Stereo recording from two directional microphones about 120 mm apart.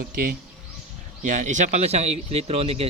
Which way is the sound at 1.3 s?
90° right.